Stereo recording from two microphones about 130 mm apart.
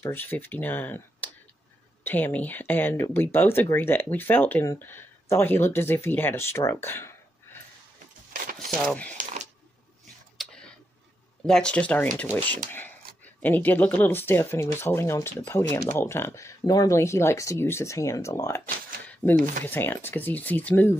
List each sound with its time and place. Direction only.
0.0 s speech: 15° left (ahead or behind)
8.6 s speech: 10° left (ahead or behind)
9.1 s a sound: 80° right
10.3 s a sound: 5° left (ahead or behind)
11.4 s speech: 5° left (ahead or behind); by 18.6 s 25° left (ahead or behind)
19.3 s speech: 90° right
19.6 s speech: 15° left (ahead or behind)